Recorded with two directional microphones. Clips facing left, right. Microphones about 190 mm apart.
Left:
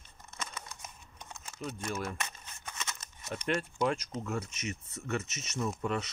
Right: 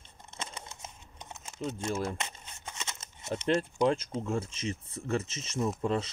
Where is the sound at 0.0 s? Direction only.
25° right (ahead or behind).